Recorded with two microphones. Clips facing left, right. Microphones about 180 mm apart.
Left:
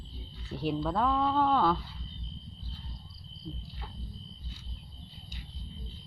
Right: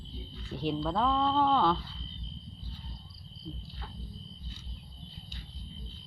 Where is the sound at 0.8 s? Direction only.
5° left (ahead or behind).